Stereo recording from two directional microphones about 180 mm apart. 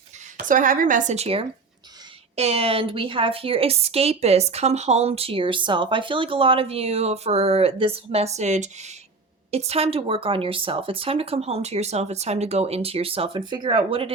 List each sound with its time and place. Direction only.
0.3 s a woman's voice: 45° right (ahead or behind); by 14.1 s 30° right (ahead or behind)